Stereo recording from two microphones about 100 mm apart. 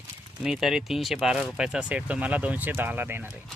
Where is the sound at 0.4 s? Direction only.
5° right (ahead or behind).